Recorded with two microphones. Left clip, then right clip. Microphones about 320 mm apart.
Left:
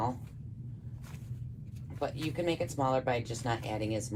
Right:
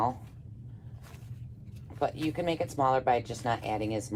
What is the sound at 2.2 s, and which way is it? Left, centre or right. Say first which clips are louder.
Speech: right 2 dB; right.